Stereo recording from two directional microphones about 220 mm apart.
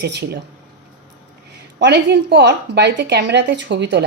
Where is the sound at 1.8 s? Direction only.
50° right (ahead or behind).